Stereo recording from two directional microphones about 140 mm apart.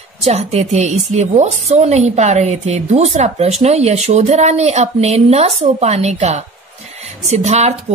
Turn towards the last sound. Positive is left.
turn(degrees=-50)  # may be behind; listen again after turning